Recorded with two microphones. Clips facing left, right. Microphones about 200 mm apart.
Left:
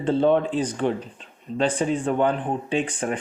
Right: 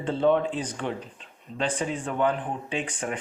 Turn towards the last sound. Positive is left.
turn(degrees=35)  # may be behind; listen again after turning